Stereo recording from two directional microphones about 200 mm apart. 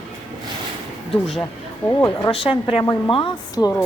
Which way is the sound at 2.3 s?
25° left (ahead or behind).